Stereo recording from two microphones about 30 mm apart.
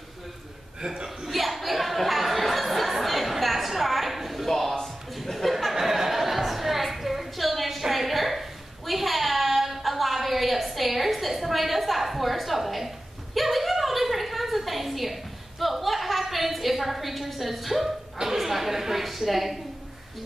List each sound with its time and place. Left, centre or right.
0.8 s speech: centre
1.3 s chatter: centre
4.5 s music: centre
5.1 s a sound: centre